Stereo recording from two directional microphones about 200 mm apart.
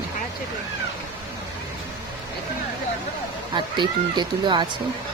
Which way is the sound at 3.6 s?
25° right (ahead or behind).